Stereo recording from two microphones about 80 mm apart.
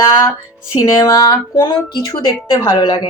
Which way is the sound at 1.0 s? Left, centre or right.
Left.